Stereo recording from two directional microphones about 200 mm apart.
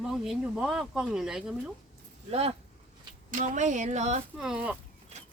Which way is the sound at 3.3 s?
40° right (ahead or behind).